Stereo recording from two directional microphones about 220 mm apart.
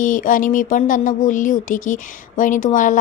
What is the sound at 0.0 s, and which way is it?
A woman's voice, 35° left (ahead or behind).